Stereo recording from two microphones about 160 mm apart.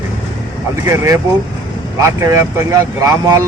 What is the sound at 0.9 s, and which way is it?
Speech, 20° right (ahead or behind).